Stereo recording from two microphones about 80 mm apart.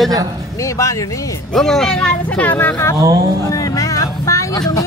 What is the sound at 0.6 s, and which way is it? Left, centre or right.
Speech, left.